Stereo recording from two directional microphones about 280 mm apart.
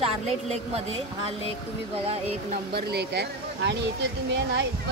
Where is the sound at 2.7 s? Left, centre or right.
Right.